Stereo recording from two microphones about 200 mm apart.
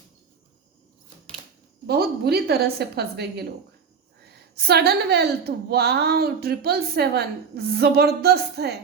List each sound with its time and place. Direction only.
1.9 s a woman's voice: 55° right (ahead or behind)